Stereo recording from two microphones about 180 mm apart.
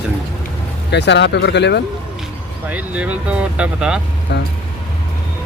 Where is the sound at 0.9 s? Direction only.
70° left (ahead or behind).